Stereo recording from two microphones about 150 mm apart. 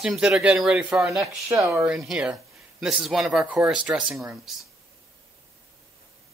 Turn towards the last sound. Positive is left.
turn(degrees=-5)  # may be behind; listen again after turning